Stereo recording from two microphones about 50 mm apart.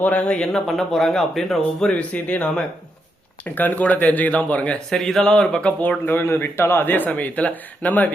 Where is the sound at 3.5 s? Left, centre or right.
Left.